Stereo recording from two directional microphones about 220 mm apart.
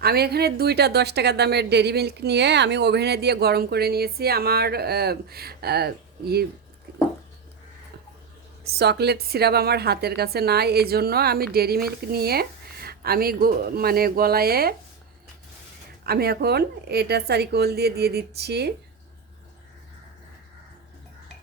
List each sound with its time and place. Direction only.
0.0 s a woman's voice: 45° right (ahead or behind)
8.8 s a woman's voice: 50° right (ahead or behind)
16.0 s a woman's voice: 45° right (ahead or behind)